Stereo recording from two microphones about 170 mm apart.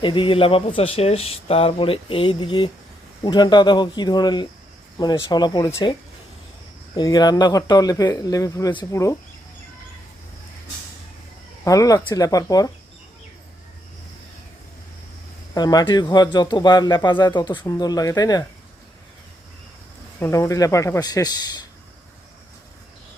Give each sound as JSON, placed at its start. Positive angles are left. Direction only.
{"t": 0.0, "sound": "speech", "side_deg": 30}
{"t": 11.6, "sound": "speech", "side_deg": 20}
{"t": 15.5, "sound": "speech", "side_deg": 25}
{"t": 20.1, "sound": "speech", "side_deg": 15}